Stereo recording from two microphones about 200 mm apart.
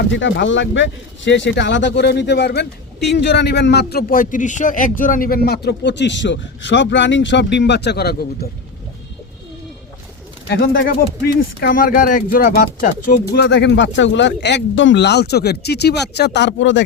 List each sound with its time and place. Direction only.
0.0 s speech: 65° left (ahead or behind)
10.4 s speech: 60° left (ahead or behind)